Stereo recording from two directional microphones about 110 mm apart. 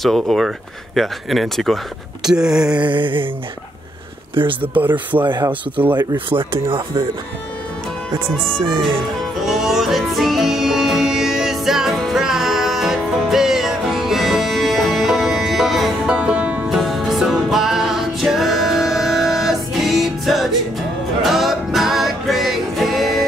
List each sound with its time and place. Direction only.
0.0 s speech: centre (ahead or behind)
2.2 s a sound: 5° right (ahead or behind)
2.9 s speech: 50° right (ahead or behind)
4.6 s a sound: 15° right (ahead or behind)
5.2 s speech: 45° right (ahead or behind)
8.6 s speech: 50° right (ahead or behind)
9.4 s music: 5° right (ahead or behind)
16.6 s music: centre (ahead or behind)